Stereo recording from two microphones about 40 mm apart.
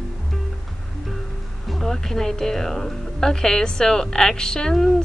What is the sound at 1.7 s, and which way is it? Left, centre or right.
A woman's voice, centre.